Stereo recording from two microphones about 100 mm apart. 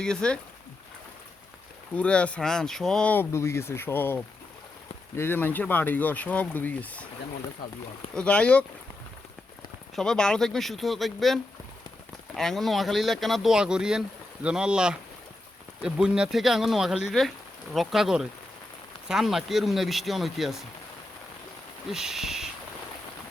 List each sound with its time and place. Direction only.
0.0 s speech: 10° left (ahead or behind)
2.0 s speech: 10° left (ahead or behind)
3.1 s speech: 25° left (ahead or behind)
8.1 s speech: 10° left (ahead or behind)
9.9 s speech: 5° left (ahead or behind)
12.4 s speech: 5° left (ahead or behind)
21.8 s speech: 5° right (ahead or behind)